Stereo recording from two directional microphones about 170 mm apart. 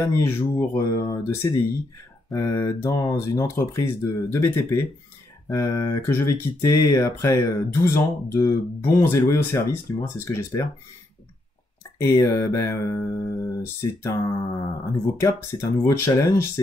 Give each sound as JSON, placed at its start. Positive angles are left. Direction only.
{"t": 0.0, "sound": "speech", "side_deg": 15}
{"t": 12.0, "sound": "music", "side_deg": 20}
{"t": 14.9, "sound": "speech", "side_deg": 15}